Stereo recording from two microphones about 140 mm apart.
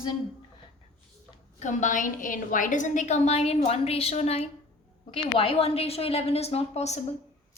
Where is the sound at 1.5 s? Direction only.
65° left (ahead or behind).